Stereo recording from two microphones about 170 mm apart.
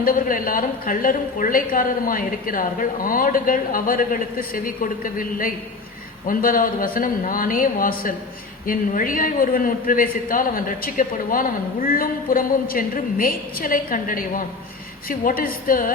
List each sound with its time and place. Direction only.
0.0 s a man's voice: 55° left (ahead or behind)